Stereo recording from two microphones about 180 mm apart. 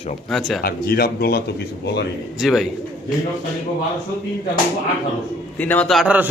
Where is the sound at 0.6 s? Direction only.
60° left (ahead or behind).